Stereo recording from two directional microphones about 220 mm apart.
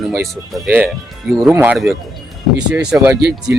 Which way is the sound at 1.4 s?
10° right (ahead or behind).